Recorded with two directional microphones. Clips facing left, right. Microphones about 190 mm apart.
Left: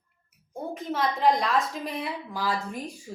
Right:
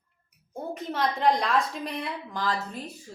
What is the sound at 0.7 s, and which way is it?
A woman's voice, centre (ahead or behind).